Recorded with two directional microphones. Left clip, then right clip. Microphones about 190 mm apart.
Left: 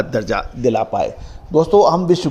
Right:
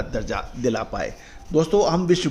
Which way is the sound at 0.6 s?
15° left (ahead or behind).